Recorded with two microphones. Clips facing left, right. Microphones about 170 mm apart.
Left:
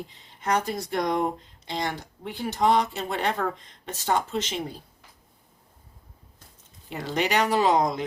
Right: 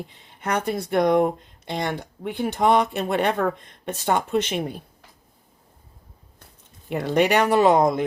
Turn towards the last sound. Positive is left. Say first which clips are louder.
# right 5 dB
turn(degrees=-55)  # may be behind; listen again after turning